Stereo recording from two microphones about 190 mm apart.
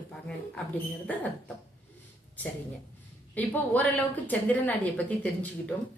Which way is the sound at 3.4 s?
10° left (ahead or behind).